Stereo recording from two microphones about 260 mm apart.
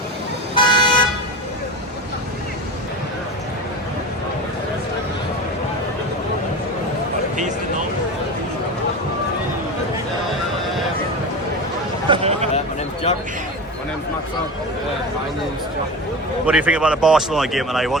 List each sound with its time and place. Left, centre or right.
0.5 s vehicle: centre
12.0 s a sound: right
16.5 s speech: centre